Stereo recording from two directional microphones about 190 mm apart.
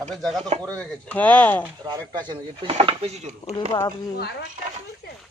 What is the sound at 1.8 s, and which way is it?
Speech, 20° right (ahead or behind).